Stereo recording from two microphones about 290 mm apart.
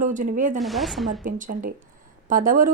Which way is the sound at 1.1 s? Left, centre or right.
Right.